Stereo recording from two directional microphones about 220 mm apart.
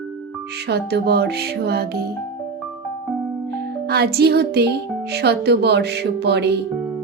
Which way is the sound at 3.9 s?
45° right (ahead or behind).